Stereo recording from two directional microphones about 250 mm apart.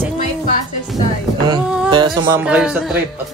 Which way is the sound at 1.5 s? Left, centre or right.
Centre.